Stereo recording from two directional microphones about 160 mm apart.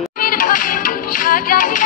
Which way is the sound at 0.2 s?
60° left (ahead or behind).